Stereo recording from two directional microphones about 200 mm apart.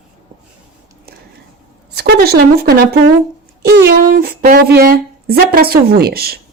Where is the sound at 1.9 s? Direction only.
50° right (ahead or behind).